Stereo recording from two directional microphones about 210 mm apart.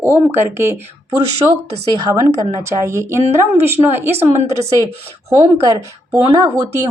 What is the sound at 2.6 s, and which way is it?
Speech, 15° right (ahead or behind).